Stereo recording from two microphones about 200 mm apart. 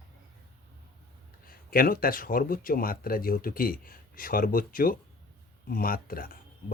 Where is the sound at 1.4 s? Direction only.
45° left (ahead or behind).